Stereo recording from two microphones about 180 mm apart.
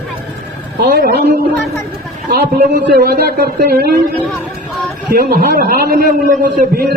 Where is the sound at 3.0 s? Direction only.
60° right (ahead or behind).